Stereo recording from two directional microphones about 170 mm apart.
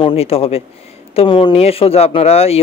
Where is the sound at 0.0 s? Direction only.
35° left (ahead or behind).